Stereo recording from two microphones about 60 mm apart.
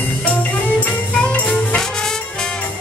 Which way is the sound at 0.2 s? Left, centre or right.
Left.